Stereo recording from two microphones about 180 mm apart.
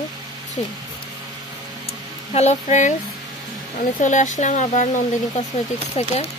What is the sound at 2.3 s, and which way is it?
Speech, 40° left (ahead or behind).